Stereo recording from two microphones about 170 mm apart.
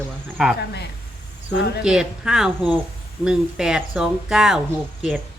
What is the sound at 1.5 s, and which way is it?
Speech, 75° left (ahead or behind).